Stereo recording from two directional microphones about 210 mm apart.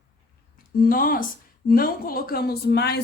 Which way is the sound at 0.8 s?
45° left (ahead or behind).